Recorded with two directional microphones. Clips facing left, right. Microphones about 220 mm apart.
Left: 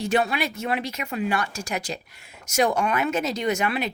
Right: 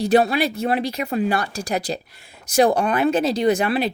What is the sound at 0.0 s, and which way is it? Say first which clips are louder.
Speech: right 6 dB; 35° right (ahead or behind).